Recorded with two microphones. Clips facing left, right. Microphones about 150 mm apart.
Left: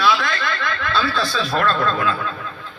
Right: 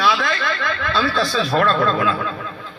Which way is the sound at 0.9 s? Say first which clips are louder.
Right 2 dB; 45° right (ahead or behind).